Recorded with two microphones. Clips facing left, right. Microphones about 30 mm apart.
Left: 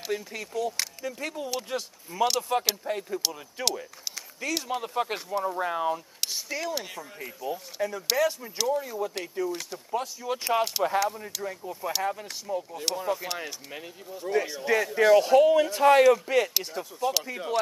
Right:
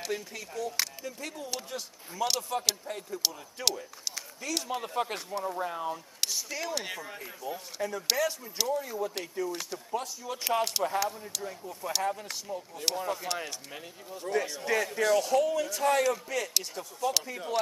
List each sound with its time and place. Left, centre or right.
0.1 s speech: centre
1.0 s a man's voice: centre
2.1 s a man's voice: left
3.6 s speech: centre
5.6 s a man's voice: left
6.5 s speech: centre
6.8 s speech: centre
7.7 s speech: centre
10.2 s a man's voice: left
10.5 s speech: centre
11.4 s speech: centre
15.0 s a man's voice: left
16.5 s speech: centre